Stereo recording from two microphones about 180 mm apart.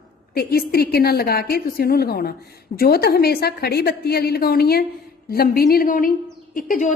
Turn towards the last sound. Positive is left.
turn(degrees=45)  # may be behind; listen again after turning